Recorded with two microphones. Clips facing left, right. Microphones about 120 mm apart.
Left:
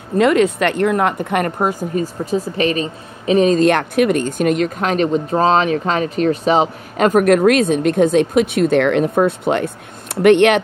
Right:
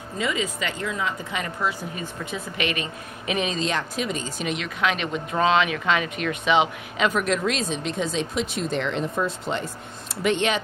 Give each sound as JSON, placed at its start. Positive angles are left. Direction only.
{"t": 0.2, "sound": "speech", "side_deg": 65}